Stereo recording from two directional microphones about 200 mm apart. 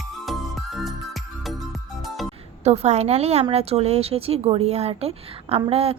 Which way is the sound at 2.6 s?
35° right (ahead or behind).